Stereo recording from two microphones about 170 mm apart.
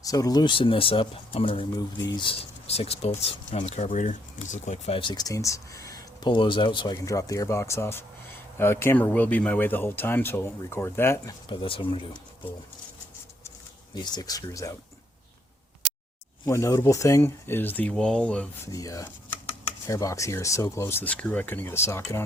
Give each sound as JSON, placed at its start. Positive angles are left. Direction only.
{"t": 0.0, "sound": "speech", "side_deg": 20}
{"t": 4.9, "sound": "speech", "side_deg": 25}
{"t": 11.4, "sound": "speech", "side_deg": 30}
{"t": 13.9, "sound": "speech", "side_deg": 25}
{"t": 16.5, "sound": "speech", "side_deg": 20}
{"t": 18.7, "sound": "chopping", "side_deg": 20}
{"t": 19.9, "sound": "speech", "side_deg": 20}